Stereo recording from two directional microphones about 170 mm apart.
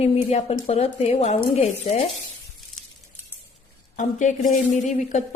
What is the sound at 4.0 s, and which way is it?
A woman's voice, 45° left (ahead or behind).